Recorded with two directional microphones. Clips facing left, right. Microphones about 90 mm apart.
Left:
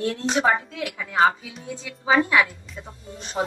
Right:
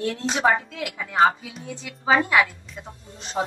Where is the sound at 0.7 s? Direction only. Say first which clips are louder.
Left 1 dB; 30° right (ahead or behind).